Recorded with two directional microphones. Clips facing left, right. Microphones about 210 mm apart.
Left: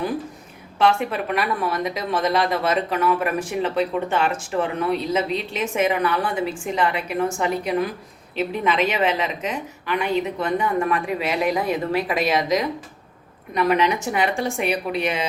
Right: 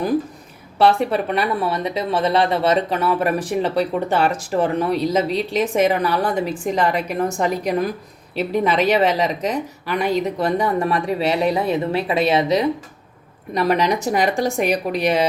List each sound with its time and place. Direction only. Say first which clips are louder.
0.8 s speech: right 4 dB; 35° right (ahead or behind)
8.9 s speech: right 5 dB; 35° right (ahead or behind)